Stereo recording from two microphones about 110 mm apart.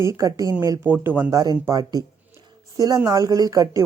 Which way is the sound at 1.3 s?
30° right (ahead or behind).